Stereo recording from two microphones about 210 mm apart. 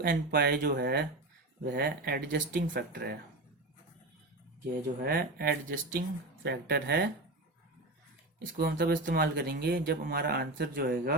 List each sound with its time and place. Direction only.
0.0 s speech: 45° right (ahead or behind)
4.6 s speech: 45° right (ahead or behind)
8.5 s speech: 45° right (ahead or behind)